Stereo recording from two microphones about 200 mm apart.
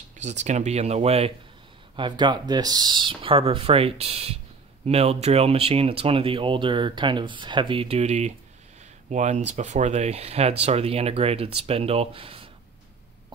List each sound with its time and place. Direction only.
0.2 s speech: 35° right (ahead or behind)